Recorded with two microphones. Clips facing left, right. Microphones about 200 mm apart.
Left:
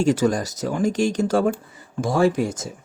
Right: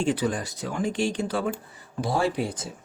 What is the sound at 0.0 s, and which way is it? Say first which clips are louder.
Speech: left 6 dB; 40° left (ahead or behind).